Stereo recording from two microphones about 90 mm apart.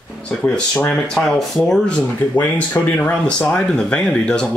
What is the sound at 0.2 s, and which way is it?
Speech, 5° left (ahead or behind).